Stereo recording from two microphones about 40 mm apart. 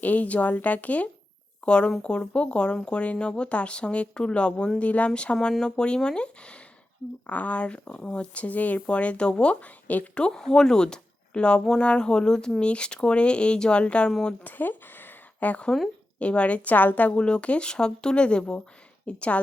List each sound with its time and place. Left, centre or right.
0.0 s speech: left
1.6 s speech: left
4.8 s speech: left
7.3 s speech: left
10.3 s speech: centre; by 14.1 s left
14.4 s a sound: left
16.1 s a woman's voice: left
16.6 s speech: left